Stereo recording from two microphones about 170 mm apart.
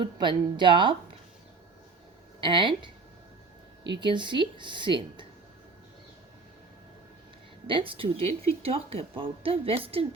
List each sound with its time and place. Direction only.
0.0 s speech: 30° right (ahead or behind)
2.4 s speech: 30° right (ahead or behind)
4.0 s speech: 25° right (ahead or behind)
7.7 s a woman's voice: 30° right (ahead or behind)